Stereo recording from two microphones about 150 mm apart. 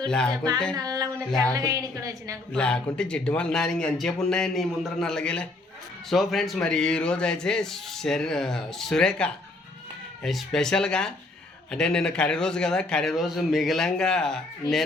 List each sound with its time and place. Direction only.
0.1 s speech: 5° left (ahead or behind)
0.8 s a sound: 25° right (ahead or behind)
1.3 s speech: 5° left (ahead or behind)
1.5 s a woman's voice: 25° right (ahead or behind)
2.5 s speech: 5° left (ahead or behind)